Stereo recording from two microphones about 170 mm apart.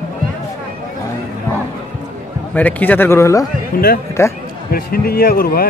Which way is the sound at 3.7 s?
60° left (ahead or behind).